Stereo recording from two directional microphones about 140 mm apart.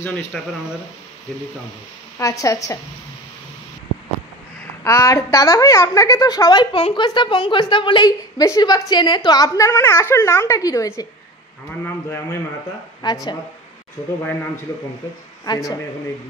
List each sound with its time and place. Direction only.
0.3 s speech: 5° left (ahead or behind)
2.1 s a woman's voice: 25° left (ahead or behind)
4.8 s a woman's voice: 20° left (ahead or behind)
9.7 s a woman's voice: 15° left (ahead or behind)
13.0 s a woman's voice: 30° left (ahead or behind)
15.5 s a woman's voice: 30° left (ahead or behind)